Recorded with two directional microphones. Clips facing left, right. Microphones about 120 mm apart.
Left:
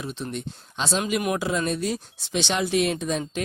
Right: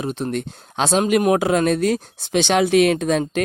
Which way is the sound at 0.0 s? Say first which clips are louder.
Right 8 dB; 55° right (ahead or behind).